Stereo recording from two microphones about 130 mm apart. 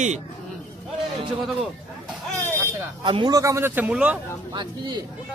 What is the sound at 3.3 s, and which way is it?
Speech, 25° right (ahead or behind).